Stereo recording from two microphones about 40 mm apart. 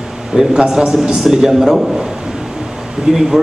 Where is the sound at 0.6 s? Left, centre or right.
Centre.